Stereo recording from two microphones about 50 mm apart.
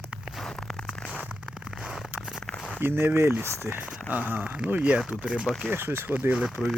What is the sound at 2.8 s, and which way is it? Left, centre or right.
Speech, right.